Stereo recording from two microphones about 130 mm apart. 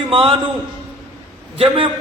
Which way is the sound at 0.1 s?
45° right (ahead or behind).